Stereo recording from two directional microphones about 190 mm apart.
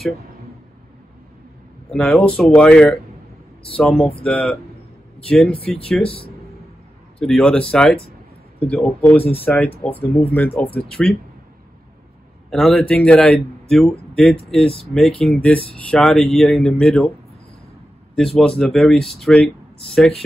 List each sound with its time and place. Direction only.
1.9 s a man's voice: 5° left (ahead or behind)
5.7 s a man's voice: 5° left (ahead or behind)
6.0 s speech: 30° left (ahead or behind)
7.2 s a man's voice: 5° left (ahead or behind)
12.4 s a man's voice: centre (ahead or behind)
18.1 s a man's voice: centre (ahead or behind)